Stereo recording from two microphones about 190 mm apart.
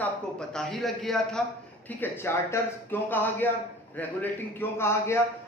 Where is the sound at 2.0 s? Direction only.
10° left (ahead or behind).